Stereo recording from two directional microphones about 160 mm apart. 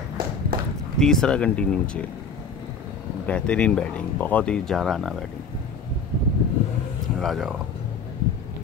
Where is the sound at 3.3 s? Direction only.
5° left (ahead or behind).